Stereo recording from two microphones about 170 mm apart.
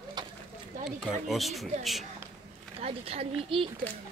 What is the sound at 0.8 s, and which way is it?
Speech, centre (ahead or behind).